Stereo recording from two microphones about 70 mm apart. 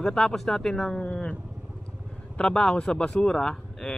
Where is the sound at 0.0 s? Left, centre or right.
Centre.